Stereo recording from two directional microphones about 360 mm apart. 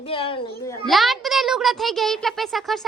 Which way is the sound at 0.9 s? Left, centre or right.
Centre.